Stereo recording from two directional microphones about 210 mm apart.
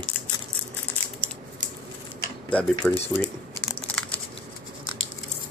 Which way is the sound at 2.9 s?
30° left (ahead or behind).